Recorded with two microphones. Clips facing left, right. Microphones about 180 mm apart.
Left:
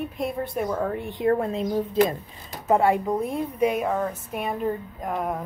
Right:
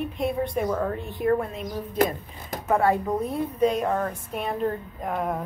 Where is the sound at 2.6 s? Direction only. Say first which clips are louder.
Left 2 dB; 20° left (ahead or behind).